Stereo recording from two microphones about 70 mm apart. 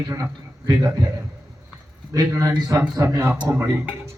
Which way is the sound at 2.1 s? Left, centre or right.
Right.